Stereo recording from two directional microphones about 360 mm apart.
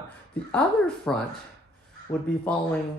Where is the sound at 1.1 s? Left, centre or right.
Centre.